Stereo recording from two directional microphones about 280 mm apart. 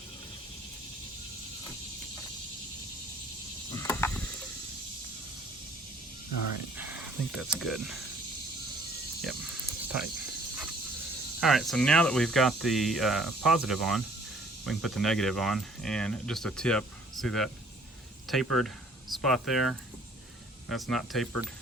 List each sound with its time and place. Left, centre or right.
3.8 s frog: centre
6.3 s speech: left
6.7 s speech: centre
9.2 s cricket: centre
11.3 s speech: centre